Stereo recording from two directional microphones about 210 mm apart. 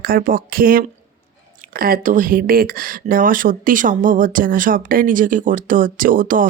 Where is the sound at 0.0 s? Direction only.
45° right (ahead or behind).